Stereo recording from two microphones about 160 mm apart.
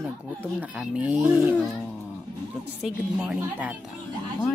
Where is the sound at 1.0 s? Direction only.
10° right (ahead or behind).